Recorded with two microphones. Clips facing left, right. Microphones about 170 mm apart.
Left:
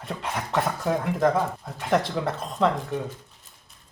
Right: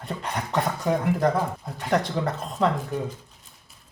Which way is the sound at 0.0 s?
Centre (ahead or behind).